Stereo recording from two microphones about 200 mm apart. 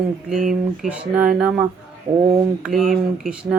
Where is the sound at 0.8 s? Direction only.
5° right (ahead or behind).